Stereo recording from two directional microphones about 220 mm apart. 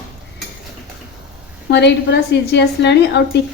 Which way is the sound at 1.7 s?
50° left (ahead or behind).